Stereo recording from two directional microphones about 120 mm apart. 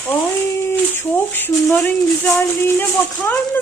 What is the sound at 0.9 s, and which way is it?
Speech, 20° left (ahead or behind).